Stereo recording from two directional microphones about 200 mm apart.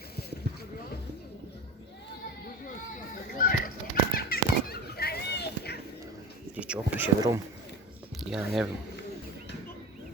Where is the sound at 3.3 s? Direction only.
45° left (ahead or behind).